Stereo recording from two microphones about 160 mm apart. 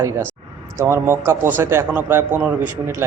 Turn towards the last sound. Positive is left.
turn(degrees=-10)  # may be behind; listen again after turning